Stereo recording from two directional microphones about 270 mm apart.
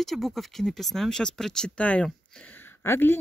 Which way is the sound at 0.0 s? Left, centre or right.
Centre.